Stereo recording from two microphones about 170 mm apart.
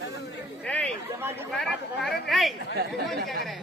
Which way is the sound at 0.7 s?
5° left (ahead or behind).